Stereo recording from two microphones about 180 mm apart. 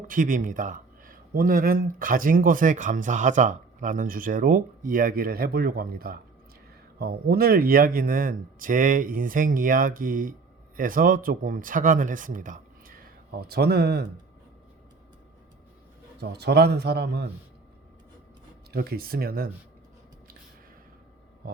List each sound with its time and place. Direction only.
0.1 s speech: 50° right (ahead or behind)
13.5 s speech: 65° right (ahead or behind)
16.3 s speech: 65° right (ahead or behind)
18.7 s speech: 60° right (ahead or behind)